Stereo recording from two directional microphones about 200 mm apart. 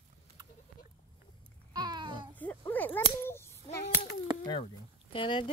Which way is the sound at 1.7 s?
20° right (ahead or behind).